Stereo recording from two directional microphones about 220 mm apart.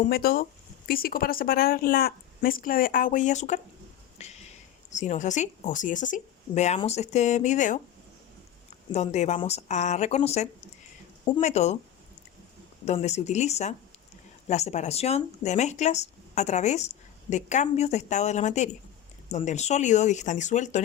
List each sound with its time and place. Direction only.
0.1 s speech: 45° left (ahead or behind)
4.2 s a sound: 30° left (ahead or behind)
4.9 s speech: 35° left (ahead or behind)
8.9 s speech: 30° left (ahead or behind)
12.8 s speech: 30° left (ahead or behind)